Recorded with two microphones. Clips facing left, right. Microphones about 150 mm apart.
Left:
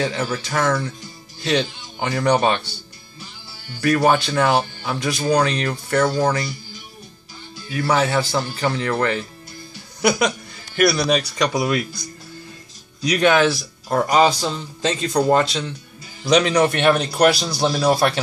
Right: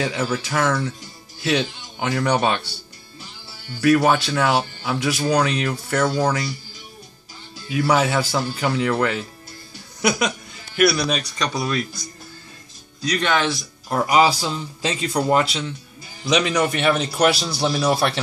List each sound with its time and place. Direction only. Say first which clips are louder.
0.0 s speech: even; 5° right (ahead or behind)
3.8 s speech: right 1 dB; centre (ahead or behind)
7.7 s speech: even; 10° right (ahead or behind); by 11.8 s 5° left (ahead or behind)
13.0 s speech: left 5 dB; 10° left (ahead or behind)
14.1 s speech: even; 5° right (ahead or behind)